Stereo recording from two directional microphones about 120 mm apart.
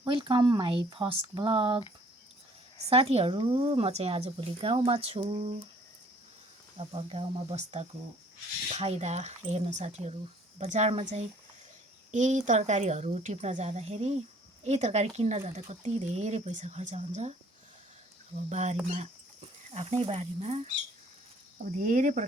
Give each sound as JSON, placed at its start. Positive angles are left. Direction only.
{"t": 0.0, "sound": "a woman's voice", "side_deg": -45}
{"t": 2.9, "sound": "a woman's voice", "side_deg": -55}
{"t": 6.7, "sound": "a woman's voice", "side_deg": -50}
{"t": 12.1, "sound": "a woman's voice", "side_deg": -90}
{"t": 12.5, "sound": "speech", "side_deg": -80}
{"t": 18.4, "sound": "speech", "side_deg": -75}
{"t": 19.7, "sound": "speech", "side_deg": -65}
{"t": 21.9, "sound": "a woman's voice", "side_deg": -90}